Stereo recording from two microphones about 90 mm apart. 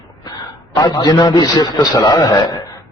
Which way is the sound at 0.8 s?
55° left (ahead or behind).